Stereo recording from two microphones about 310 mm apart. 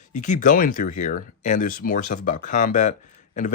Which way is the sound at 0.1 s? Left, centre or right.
Left.